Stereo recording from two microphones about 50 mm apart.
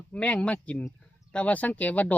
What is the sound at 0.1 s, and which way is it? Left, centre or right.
Speech, left.